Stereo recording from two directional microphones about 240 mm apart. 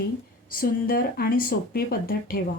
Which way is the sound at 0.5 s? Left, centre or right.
Left.